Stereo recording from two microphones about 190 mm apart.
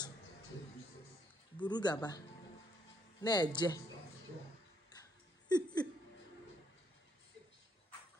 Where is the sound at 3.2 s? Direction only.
20° left (ahead or behind).